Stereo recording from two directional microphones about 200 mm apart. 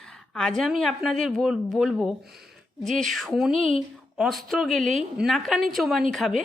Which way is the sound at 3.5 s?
30° left (ahead or behind).